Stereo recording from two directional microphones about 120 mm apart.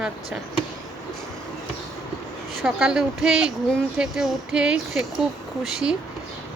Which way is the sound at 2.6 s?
5° right (ahead or behind).